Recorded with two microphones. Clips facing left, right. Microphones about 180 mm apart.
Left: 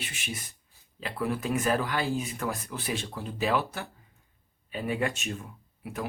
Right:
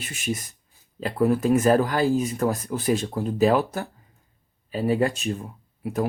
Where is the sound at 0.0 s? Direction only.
45° right (ahead or behind).